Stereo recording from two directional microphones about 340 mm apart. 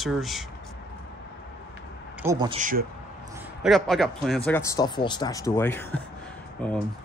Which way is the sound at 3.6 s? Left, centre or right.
Centre.